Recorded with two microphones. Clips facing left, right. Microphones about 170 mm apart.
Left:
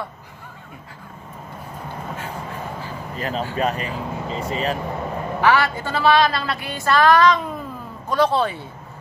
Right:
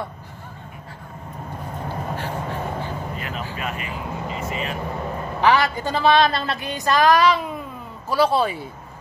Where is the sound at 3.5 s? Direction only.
35° left (ahead or behind).